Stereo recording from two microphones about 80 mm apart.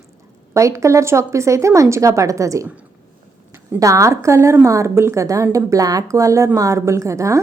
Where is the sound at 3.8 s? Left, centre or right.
Right.